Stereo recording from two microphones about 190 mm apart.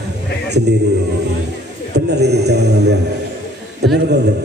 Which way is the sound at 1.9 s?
60° right (ahead or behind).